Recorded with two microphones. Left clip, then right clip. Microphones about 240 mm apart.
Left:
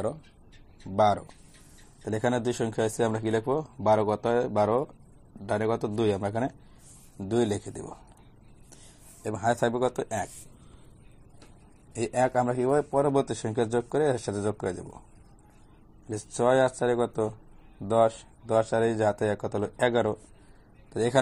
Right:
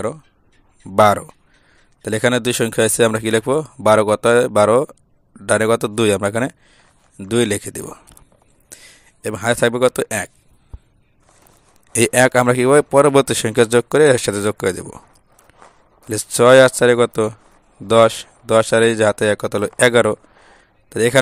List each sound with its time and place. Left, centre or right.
0.9 s speech: right
7.3 s speech: right
9.2 s speech: right
11.9 s speech: right
16.1 s speech: right
16.5 s speech: right
20.9 s speech: right